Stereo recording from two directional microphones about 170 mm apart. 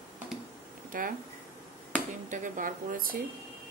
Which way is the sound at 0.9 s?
55° right (ahead or behind).